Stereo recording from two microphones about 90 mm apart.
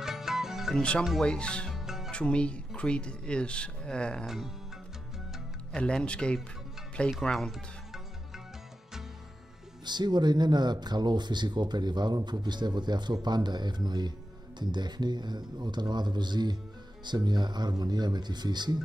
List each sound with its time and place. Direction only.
0.0 s music: 5° right (ahead or behind)
1.2 s speech: 10° left (ahead or behind)
1.7 s music: 5° right (ahead or behind)
2.0 s speech: 10° left (ahead or behind)
5.8 s speech: 10° left (ahead or behind)
9.8 s speech: 55° right (ahead or behind)